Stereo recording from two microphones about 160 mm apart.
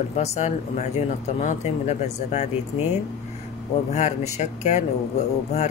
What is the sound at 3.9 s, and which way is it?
Speech, 45° left (ahead or behind).